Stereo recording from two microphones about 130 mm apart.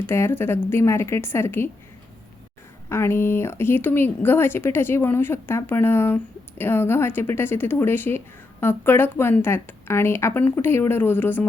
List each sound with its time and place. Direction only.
0.0 s a woman's voice: 15° left (ahead or behind)
2.9 s speech: 20° left (ahead or behind)